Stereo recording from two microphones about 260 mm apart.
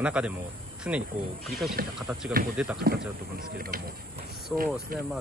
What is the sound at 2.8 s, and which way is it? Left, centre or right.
Speech, right.